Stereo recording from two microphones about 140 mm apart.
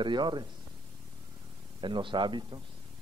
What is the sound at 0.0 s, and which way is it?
Speech, 35° right (ahead or behind).